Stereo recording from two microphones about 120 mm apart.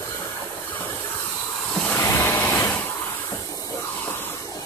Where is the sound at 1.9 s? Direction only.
20° left (ahead or behind).